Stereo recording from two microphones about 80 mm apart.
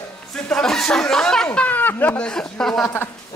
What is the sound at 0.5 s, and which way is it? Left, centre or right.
Speech, centre.